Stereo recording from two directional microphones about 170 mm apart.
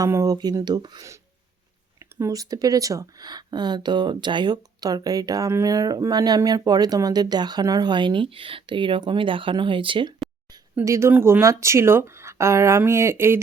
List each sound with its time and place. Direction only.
0.0 s speech: 20° right (ahead or behind)
10.8 s speech: 15° right (ahead or behind)